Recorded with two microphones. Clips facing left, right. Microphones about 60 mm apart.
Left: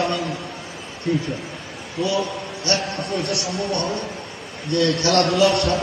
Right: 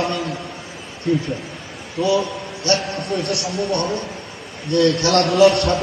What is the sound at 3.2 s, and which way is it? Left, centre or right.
Speech, right.